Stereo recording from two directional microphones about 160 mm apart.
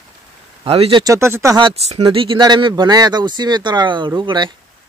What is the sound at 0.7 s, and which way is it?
Speech, 35° right (ahead or behind).